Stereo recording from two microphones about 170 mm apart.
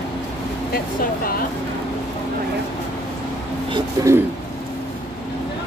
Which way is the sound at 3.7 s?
20° right (ahead or behind).